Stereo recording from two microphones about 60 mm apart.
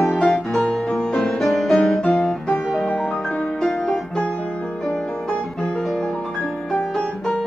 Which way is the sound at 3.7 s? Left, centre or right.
Centre.